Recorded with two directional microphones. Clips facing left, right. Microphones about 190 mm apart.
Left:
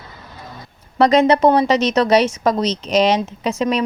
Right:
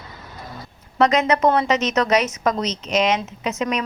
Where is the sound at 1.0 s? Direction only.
30° left (ahead or behind).